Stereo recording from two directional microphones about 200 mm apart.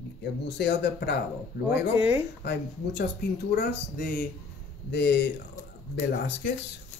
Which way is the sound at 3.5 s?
50° left (ahead or behind).